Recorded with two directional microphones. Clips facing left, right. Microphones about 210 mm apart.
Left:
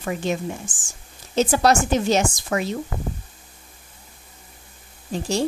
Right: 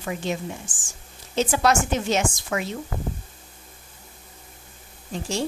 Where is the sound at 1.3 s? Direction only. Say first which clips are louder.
Left 3 dB; 40° left (ahead or behind).